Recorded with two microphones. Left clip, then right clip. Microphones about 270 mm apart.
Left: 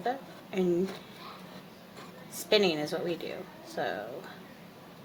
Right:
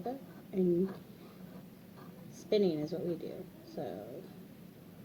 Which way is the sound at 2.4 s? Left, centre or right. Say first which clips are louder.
Left 5 dB; left.